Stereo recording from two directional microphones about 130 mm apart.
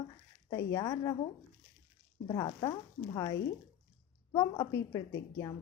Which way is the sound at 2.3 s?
30° left (ahead or behind).